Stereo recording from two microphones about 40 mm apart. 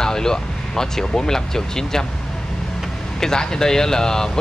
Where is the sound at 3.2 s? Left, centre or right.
Centre.